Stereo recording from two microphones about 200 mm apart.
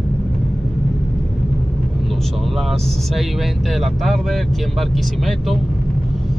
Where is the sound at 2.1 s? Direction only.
Centre (ahead or behind).